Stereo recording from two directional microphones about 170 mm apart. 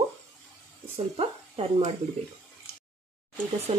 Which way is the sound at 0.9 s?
35° right (ahead or behind).